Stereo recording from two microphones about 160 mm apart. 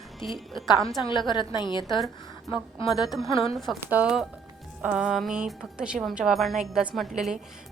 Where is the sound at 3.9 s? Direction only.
5° right (ahead or behind).